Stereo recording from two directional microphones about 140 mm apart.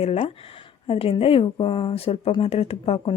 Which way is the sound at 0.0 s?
45° left (ahead or behind).